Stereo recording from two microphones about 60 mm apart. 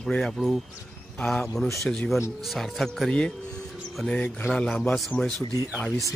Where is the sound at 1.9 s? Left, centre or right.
Centre.